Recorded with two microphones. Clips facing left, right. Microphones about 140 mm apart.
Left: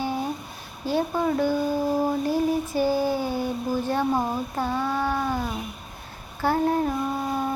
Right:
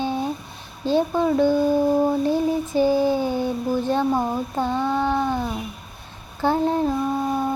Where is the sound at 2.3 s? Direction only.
20° right (ahead or behind).